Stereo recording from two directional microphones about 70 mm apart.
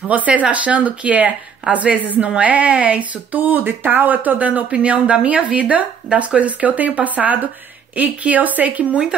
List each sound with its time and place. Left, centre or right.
0.1 s a woman's voice: right